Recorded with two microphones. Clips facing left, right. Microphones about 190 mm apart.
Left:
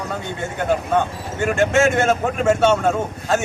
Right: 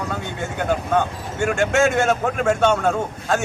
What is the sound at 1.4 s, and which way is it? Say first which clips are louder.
A man's voice: left 1 dB; centre (ahead or behind).